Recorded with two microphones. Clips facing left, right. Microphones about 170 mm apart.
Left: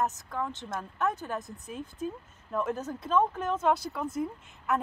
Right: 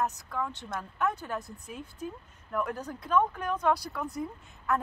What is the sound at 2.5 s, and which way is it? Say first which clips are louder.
Speech: left 2 dB; 20° left (ahead or behind).